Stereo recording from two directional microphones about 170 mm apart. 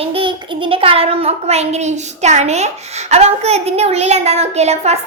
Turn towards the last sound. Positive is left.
turn(degrees=-40)  # may be behind; listen again after turning